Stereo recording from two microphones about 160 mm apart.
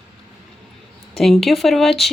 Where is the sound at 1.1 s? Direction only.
Centre (ahead or behind).